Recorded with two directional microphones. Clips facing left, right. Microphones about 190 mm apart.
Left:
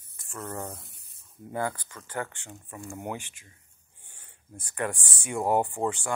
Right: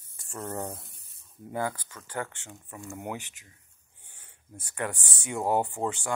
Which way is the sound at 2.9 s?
20° left (ahead or behind).